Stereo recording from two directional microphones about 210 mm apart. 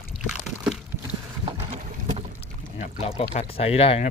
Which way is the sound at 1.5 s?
30° right (ahead or behind).